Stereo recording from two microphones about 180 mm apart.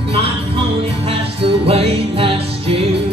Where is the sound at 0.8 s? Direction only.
30° right (ahead or behind).